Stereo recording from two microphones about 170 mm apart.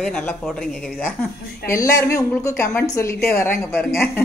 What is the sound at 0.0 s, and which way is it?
A woman's voice, 10° left (ahead or behind).